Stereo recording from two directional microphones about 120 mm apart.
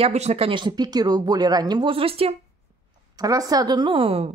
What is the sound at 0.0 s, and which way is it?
Speech, 65° right (ahead or behind).